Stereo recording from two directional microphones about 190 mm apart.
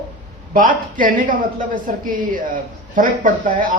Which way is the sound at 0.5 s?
45° right (ahead or behind).